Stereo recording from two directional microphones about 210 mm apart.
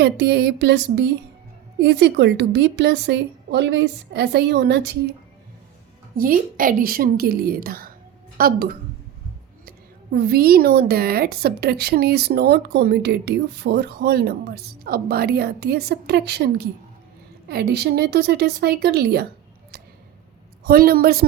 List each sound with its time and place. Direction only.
0.0 s a woman's voice: 50° right (ahead or behind)
6.1 s a woman's voice: 40° right (ahead or behind)
20.7 s a woman's voice: 45° right (ahead or behind)